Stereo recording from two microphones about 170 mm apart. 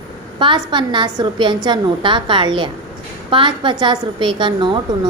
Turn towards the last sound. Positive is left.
turn(degrees=-25)  # may be behind; listen again after turning